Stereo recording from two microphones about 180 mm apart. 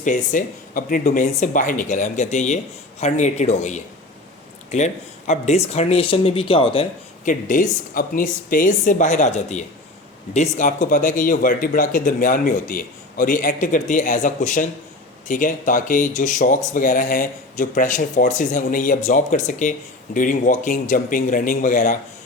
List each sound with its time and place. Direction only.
0.0 s speech: 45° left (ahead or behind); by 6.8 s 30° left (ahead or behind)
7.3 s speech: 45° left (ahead or behind)